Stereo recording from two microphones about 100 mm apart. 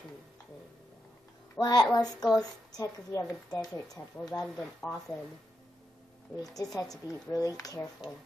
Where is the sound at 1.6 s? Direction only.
40° left (ahead or behind).